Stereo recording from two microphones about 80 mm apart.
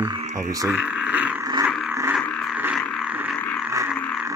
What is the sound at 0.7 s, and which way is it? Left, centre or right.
Speech, centre.